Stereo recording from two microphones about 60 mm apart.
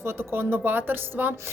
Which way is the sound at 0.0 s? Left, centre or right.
Right.